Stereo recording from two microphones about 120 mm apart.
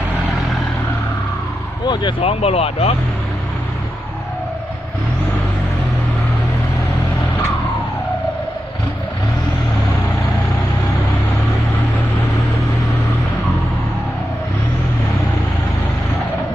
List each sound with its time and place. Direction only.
1.9 s speech: 40° left (ahead or behind)
2.2 s speech: 55° left (ahead or behind)